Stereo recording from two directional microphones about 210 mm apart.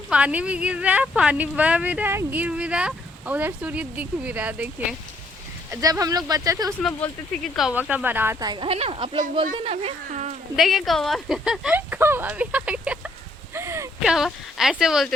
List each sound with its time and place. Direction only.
0.1 s a woman's voice: 5° right (ahead or behind)
5.7 s a woman's voice: 15° right (ahead or behind)
6.8 s a woman's voice: centre (ahead or behind); by 10.3 s 30° right (ahead or behind)
10.6 s speech: centre (ahead or behind)
13.5 s a sound: 10° right (ahead or behind)